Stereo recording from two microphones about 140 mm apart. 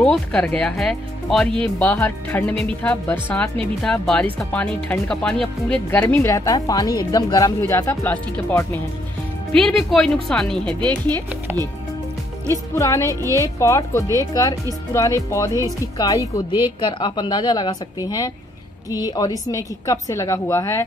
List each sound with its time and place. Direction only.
0.0 s speech: 5° left (ahead or behind)
12.4 s speech: 20° left (ahead or behind)
13.1 s speech: 25° right (ahead or behind)
13.4 s speech: 20° left (ahead or behind)
16.8 s a woman's voice: 35° left (ahead or behind)